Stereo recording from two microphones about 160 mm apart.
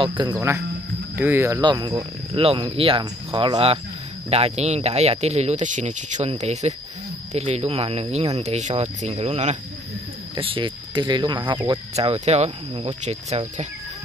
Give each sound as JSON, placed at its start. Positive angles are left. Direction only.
{"t": 0.2, "sound": "speech", "side_deg": -20}
{"t": 1.6, "sound": "speech", "side_deg": -30}
{"t": 11.9, "sound": "speech", "side_deg": -40}